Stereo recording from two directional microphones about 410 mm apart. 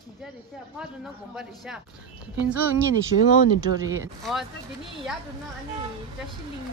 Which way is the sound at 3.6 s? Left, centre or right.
Centre.